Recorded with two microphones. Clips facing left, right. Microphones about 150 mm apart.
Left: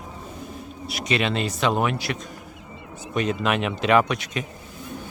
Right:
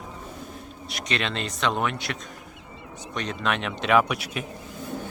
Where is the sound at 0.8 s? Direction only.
5° left (ahead or behind).